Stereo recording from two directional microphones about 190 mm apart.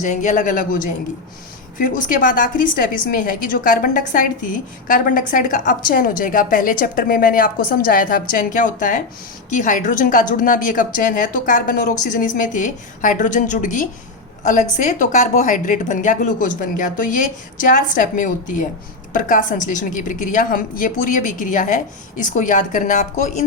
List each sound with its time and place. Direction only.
0.0 s a woman's voice: 40° left (ahead or behind)